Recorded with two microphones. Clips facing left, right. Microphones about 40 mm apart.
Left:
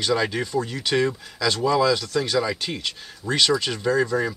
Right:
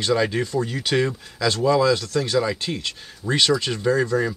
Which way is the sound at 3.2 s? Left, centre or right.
Centre.